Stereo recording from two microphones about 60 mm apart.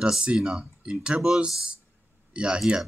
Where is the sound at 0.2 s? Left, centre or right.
Centre.